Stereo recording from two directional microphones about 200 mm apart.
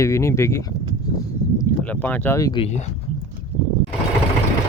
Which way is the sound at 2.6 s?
35° left (ahead or behind).